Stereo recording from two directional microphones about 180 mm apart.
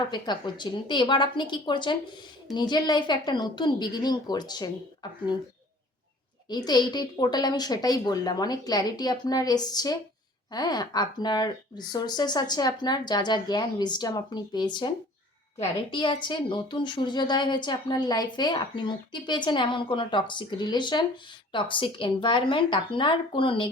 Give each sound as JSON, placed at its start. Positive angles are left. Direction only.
{"t": 0.1, "sound": "a woman's voice", "side_deg": 25}
{"t": 6.5, "sound": "a woman's voice", "side_deg": 25}